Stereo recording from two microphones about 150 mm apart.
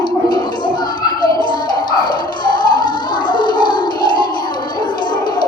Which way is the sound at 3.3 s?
30° left (ahead or behind).